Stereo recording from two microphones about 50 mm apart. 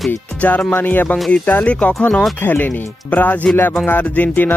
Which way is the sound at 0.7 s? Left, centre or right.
Left.